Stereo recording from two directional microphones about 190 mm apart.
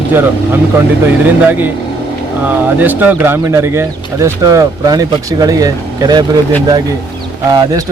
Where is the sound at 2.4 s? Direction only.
10° right (ahead or behind).